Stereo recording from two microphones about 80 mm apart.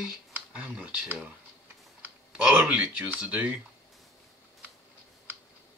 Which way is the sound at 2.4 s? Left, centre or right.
Centre.